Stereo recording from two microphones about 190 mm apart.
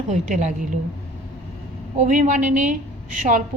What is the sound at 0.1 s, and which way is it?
Speech, 40° right (ahead or behind).